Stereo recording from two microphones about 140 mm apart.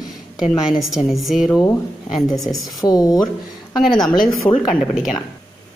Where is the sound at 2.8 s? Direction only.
25° left (ahead or behind).